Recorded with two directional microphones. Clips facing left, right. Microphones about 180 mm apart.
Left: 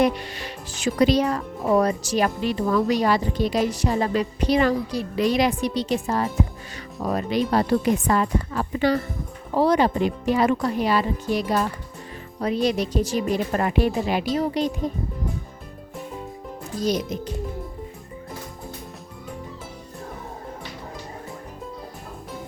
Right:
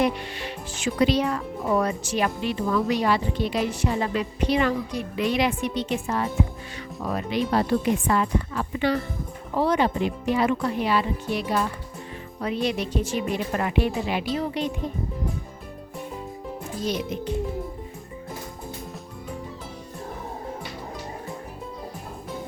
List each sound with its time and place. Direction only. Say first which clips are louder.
0.0 s speech: left 3 dB; 40° left (ahead or behind)
16.8 s speech: left 3 dB; 40° left (ahead or behind)